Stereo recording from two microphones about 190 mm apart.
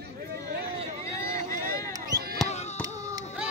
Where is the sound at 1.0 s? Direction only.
15° left (ahead or behind).